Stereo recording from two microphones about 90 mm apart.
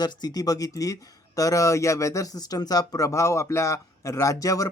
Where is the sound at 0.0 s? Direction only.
50° left (ahead or behind).